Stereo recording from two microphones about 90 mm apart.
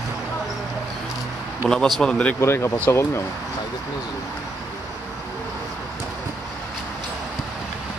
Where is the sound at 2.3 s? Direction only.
30° left (ahead or behind).